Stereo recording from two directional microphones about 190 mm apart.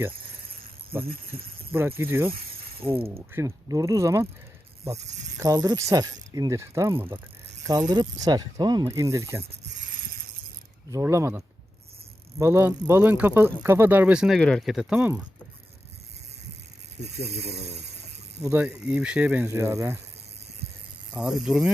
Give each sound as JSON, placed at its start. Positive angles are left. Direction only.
{"t": 2.0, "sound": "speech", "side_deg": -10}
{"t": 5.4, "sound": "speech", "side_deg": -20}
{"t": 10.8, "sound": "speech", "side_deg": -15}
{"t": 18.4, "sound": "speech", "side_deg": -10}
{"t": 21.1, "sound": "speech", "side_deg": -5}